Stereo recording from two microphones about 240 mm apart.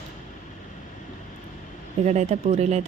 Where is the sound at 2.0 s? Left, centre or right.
Right.